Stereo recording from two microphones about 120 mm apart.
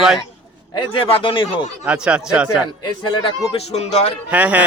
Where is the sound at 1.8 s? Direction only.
5° right (ahead or behind).